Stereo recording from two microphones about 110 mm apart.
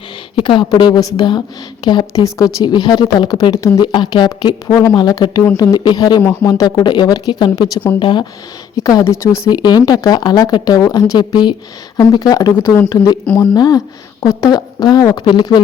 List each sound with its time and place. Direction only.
0.3 s a woman's voice: 45° left (ahead or behind)
2.1 s a woman's voice: 30° left (ahead or behind)
2.6 s speech: 40° left (ahead or behind)
3.8 s a woman's voice: 40° left (ahead or behind)
4.4 s a woman's voice: 30° left (ahead or behind)
9.0 s a woman's voice: 25° left (ahead or behind)
9.6 s speech: 40° left (ahead or behind)